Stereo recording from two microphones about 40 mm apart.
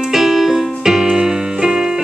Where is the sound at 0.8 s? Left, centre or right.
Centre.